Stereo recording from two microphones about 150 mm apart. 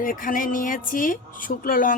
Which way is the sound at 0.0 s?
65° left (ahead or behind).